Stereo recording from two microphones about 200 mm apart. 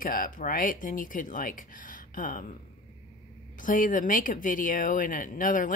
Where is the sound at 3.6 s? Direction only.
40° left (ahead or behind).